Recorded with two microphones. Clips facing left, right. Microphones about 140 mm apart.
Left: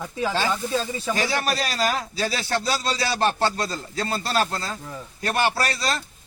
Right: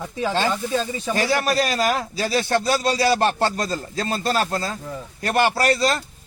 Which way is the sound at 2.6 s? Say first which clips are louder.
Right 4 dB; 50° right (ahead or behind).